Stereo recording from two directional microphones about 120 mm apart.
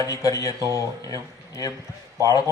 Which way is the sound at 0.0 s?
30° left (ahead or behind).